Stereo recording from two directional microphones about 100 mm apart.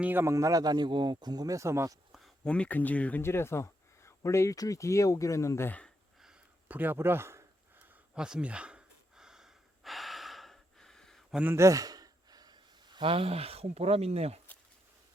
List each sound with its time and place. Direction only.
0.0 s speech: 20° right (ahead or behind)
2.4 s speech: 10° left (ahead or behind); by 5.7 s 30° left (ahead or behind)
6.7 s speech: 20° right (ahead or behind)
8.1 s gasp: 10° right (ahead or behind)
11.5 s gasp: 30° right (ahead or behind)
13.1 s speech: 70° right (ahead or behind); by 14.4 s 90° right